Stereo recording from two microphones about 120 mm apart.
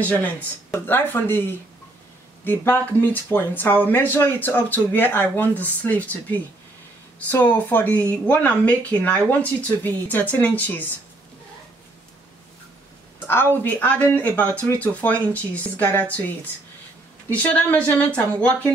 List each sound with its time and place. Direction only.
0.0 s speech: 10° left (ahead or behind)
13.3 s speech: 20° left (ahead or behind)
17.3 s speech: 15° left (ahead or behind)